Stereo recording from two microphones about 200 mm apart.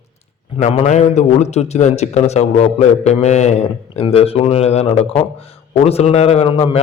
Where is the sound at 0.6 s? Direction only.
35° left (ahead or behind).